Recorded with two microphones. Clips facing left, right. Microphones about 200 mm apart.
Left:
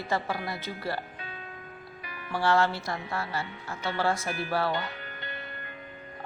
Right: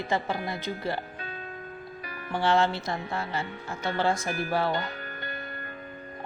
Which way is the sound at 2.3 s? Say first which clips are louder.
Right 1 dB; 20° right (ahead or behind).